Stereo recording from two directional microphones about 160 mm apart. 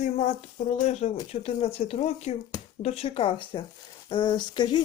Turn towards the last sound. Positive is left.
turn(degrees=25)  # may be behind; listen again after turning